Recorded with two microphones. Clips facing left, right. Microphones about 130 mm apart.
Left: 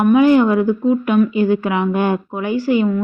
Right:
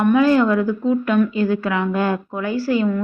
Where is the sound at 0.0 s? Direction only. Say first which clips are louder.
Left 3 dB; 15° left (ahead or behind).